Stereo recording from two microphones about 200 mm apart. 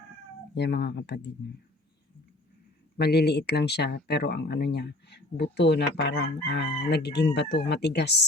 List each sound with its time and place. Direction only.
0.5 s speech: 60° left (ahead or behind)
3.0 s speech: 55° left (ahead or behind)